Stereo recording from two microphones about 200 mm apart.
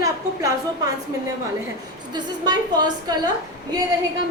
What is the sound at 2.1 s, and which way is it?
A woman's voice, 20° right (ahead or behind).